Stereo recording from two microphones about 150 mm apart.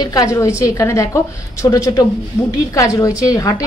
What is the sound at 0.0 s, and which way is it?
A woman's voice, 25° left (ahead or behind).